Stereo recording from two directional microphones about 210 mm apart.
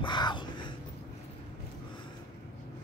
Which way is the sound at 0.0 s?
20° left (ahead or behind).